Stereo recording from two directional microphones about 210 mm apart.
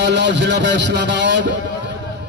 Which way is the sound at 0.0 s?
55° right (ahead or behind).